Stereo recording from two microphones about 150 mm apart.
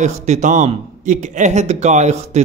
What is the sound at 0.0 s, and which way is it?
A man's voice, 50° right (ahead or behind).